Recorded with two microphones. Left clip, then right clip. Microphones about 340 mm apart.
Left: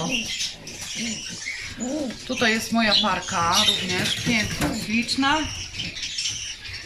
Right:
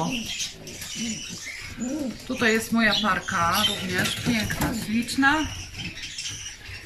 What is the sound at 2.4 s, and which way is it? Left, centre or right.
Speech, centre.